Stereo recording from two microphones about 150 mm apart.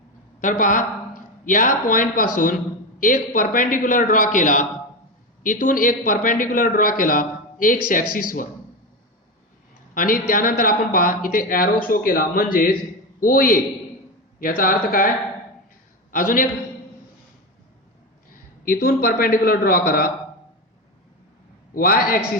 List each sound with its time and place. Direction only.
0.4 s a man's voice: 60° left (ahead or behind)
9.9 s a woman's voice: 70° left (ahead or behind)
16.1 s a man's voice: 65° left (ahead or behind)
18.6 s a woman's voice: 75° left (ahead or behind)
21.8 s a woman's voice: 75° left (ahead or behind)